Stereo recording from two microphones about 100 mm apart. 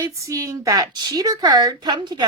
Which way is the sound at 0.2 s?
35° right (ahead or behind).